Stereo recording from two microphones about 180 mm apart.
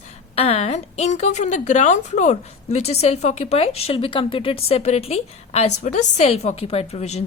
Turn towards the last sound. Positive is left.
turn(degrees=35)  # may be behind; listen again after turning